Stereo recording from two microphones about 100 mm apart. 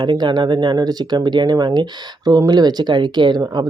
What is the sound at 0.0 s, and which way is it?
Speech, 50° right (ahead or behind).